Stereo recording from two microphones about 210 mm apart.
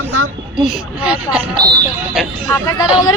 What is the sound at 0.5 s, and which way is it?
Speech, 5° right (ahead or behind).